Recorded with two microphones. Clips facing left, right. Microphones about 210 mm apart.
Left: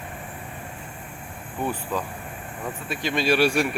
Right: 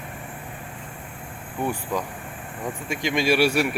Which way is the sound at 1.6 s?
10° right (ahead or behind).